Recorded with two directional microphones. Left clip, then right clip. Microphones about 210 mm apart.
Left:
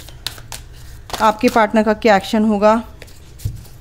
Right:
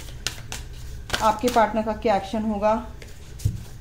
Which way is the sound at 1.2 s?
50° left (ahead or behind).